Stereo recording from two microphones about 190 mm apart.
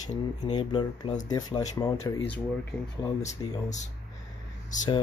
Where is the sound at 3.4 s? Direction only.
20° left (ahead or behind).